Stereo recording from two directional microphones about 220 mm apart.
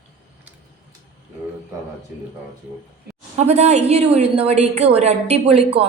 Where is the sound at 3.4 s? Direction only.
30° right (ahead or behind).